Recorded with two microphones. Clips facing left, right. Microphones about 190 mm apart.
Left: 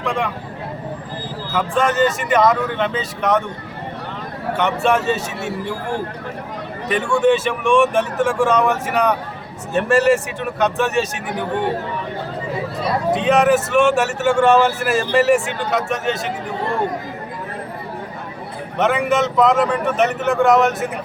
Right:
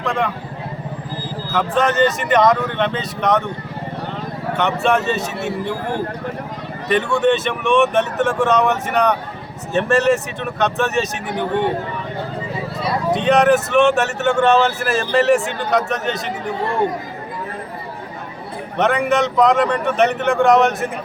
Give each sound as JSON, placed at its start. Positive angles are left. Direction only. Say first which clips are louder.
{"t": 0.0, "sound": "speech", "louder": "right 1 dB", "side_deg": 10}
{"t": 1.5, "sound": "speech", "louder": "right 1 dB", "side_deg": 5}
{"t": 4.5, "sound": "speech", "louder": "even", "side_deg": 10}
{"t": 6.8, "sound": "speech", "louder": "even", "side_deg": 5}
{"t": 13.1, "sound": "speech", "louder": "right 1 dB", "side_deg": 5}
{"t": 18.8, "sound": "speech", "louder": "even", "side_deg": 5}